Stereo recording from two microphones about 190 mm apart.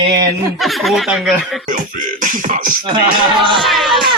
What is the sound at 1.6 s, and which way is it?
Speech, 45° right (ahead or behind).